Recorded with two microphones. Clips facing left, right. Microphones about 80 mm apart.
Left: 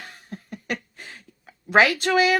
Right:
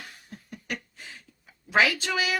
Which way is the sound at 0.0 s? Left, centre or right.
Left.